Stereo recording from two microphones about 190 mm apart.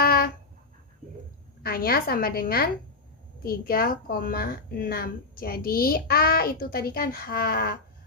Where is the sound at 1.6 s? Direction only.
50° left (ahead or behind).